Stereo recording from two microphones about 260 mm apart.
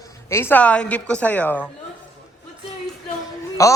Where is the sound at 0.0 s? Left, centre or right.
Centre.